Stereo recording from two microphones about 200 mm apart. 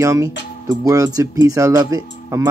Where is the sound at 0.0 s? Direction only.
15° right (ahead or behind).